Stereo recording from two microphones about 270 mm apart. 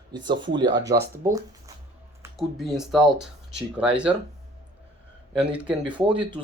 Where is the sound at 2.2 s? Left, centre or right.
Centre.